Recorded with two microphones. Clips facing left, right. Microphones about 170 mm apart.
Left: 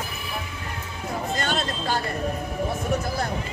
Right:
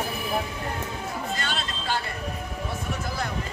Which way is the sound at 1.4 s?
45° left (ahead or behind).